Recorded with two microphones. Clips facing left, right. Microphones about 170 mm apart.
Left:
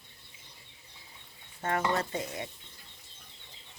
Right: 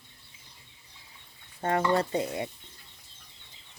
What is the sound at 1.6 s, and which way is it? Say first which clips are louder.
Dishes: right 4 dB; 30° right (ahead or behind).